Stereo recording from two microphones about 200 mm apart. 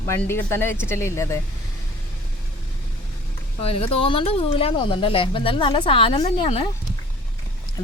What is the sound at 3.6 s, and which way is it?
Speech, 30° left (ahead or behind).